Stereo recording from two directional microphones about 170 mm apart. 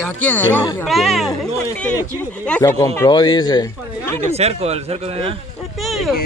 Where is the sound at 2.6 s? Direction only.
20° left (ahead or behind).